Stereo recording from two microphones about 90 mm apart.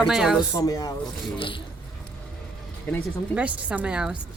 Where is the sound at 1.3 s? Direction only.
75° left (ahead or behind).